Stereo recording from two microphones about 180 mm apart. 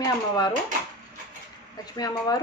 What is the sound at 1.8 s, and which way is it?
Speech, 20° left (ahead or behind).